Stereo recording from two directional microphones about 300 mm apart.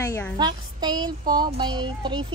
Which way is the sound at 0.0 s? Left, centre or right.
Centre.